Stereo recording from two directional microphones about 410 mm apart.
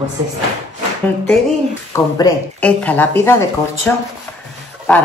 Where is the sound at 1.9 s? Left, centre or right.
Centre.